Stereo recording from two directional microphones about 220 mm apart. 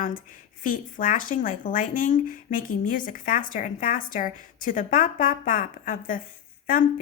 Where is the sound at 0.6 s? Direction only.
40° left (ahead or behind).